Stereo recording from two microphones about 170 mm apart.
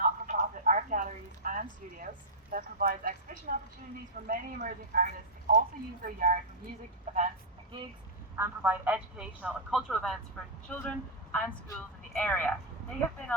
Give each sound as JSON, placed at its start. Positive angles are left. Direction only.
{"t": 0.0, "sound": "a sound", "side_deg": -50}
{"t": 2.5, "sound": "a woman's voice", "side_deg": -55}
{"t": 8.4, "sound": "a man's voice", "side_deg": -15}